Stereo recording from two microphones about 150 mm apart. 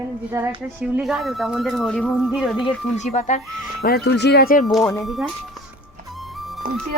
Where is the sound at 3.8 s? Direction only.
90° left.